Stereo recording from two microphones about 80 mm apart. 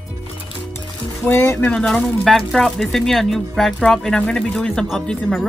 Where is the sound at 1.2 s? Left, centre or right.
Left.